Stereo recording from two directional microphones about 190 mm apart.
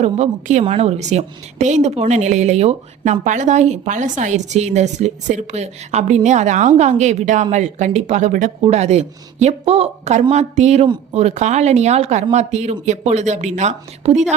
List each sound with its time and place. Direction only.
0.0 s a woman's voice: 40° right (ahead or behind)